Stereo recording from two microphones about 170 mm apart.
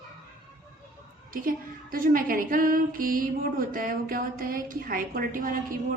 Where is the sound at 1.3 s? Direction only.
55° right (ahead or behind).